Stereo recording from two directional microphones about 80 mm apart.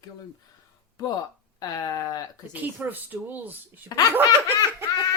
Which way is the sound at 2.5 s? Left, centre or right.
Right.